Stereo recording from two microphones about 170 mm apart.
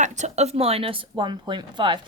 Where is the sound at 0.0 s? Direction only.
45° right (ahead or behind).